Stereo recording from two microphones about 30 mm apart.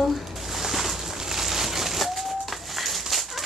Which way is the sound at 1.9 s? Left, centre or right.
Centre.